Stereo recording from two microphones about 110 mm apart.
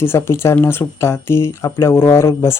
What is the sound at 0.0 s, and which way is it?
Speech, 20° left (ahead or behind).